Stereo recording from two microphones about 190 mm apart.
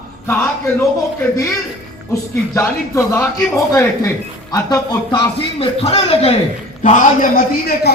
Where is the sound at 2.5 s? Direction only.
15° left (ahead or behind); by 6.3 s 30° left (ahead or behind).